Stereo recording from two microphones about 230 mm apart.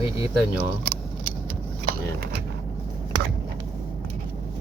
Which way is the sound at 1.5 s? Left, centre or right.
Right.